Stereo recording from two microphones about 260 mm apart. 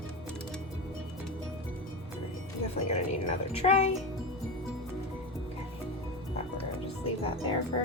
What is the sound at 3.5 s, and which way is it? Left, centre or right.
Speech, left.